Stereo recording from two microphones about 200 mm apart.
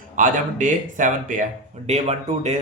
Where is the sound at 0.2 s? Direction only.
40° right (ahead or behind).